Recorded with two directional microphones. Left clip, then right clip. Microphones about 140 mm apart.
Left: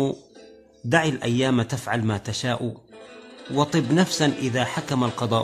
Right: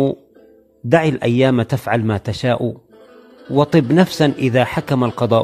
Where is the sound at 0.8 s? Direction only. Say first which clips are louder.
Right 7 dB; 50° right (ahead or behind).